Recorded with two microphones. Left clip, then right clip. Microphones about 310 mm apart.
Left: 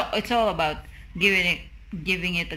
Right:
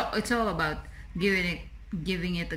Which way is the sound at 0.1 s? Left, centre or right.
Centre.